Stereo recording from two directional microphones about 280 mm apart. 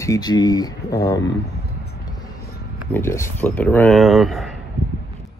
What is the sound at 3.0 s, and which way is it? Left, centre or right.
Speech, centre.